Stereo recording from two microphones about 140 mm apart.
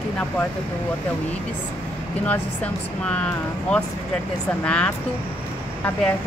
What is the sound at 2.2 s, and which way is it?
Speech, 10° left (ahead or behind).